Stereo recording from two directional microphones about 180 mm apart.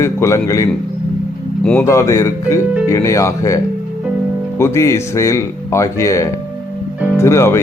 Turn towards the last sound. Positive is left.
turn(degrees=15)  # may be behind; listen again after turning